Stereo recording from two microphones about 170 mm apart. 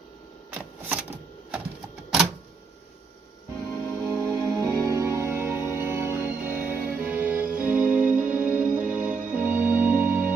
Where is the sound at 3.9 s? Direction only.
5° left (ahead or behind).